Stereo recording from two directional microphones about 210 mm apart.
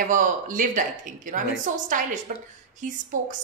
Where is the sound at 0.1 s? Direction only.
40° right (ahead or behind).